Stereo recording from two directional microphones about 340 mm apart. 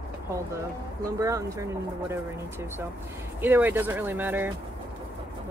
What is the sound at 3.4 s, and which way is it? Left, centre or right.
Speech, centre.